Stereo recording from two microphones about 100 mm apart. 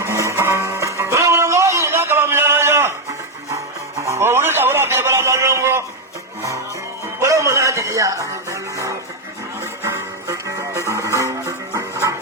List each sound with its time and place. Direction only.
0.0 s music: 30° right (ahead or behind)
4.0 s a sound: 25° right (ahead or behind)
7.2 s music: 30° right (ahead or behind)